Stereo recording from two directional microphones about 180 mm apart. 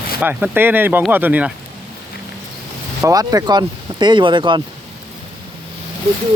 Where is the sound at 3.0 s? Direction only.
20° right (ahead or behind).